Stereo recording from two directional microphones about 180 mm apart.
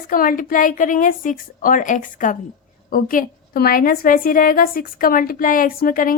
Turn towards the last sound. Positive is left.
turn(degrees=50)  # may be behind; listen again after turning